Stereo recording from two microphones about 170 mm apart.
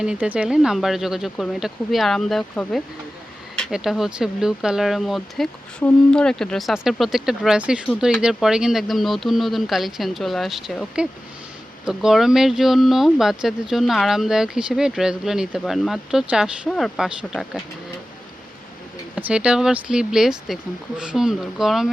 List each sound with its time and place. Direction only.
0.0 s speech: 5° right (ahead or behind)
19.1 s speech: 5° right (ahead or behind)